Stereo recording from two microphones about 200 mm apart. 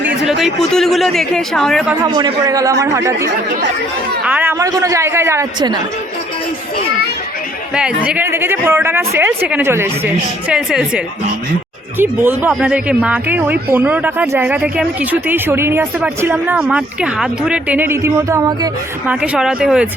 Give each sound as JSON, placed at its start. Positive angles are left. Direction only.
{"t": 0.0, "sound": "speech", "side_deg": 0}
{"t": 2.0, "sound": "speech", "side_deg": -20}
{"t": 8.0, "sound": "speech", "side_deg": -10}
{"t": 19.0, "sound": "speech", "side_deg": -5}